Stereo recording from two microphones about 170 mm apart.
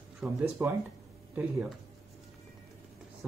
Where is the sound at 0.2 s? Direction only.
5° right (ahead or behind).